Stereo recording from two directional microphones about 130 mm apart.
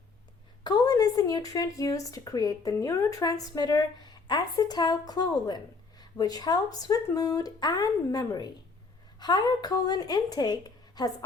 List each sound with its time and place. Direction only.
0.6 s speech: 30° left (ahead or behind)